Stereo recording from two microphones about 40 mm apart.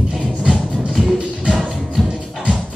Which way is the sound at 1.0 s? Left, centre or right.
Centre.